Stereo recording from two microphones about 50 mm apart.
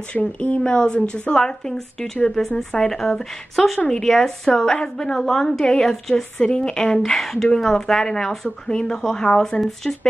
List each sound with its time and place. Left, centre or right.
0.1 s speech: left